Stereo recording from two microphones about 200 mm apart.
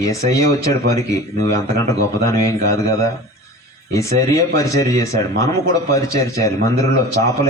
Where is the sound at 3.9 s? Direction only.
15° left (ahead or behind).